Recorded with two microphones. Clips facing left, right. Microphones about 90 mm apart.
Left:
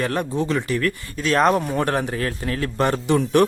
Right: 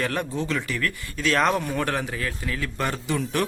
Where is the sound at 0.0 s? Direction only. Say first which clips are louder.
Left 4 dB; 30° left (ahead or behind).